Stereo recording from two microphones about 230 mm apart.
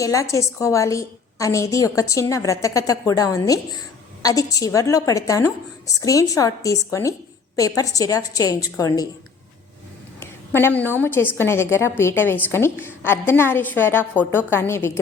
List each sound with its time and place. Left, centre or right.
0.0 s a woman's voice: centre
10.2 s a woman's voice: centre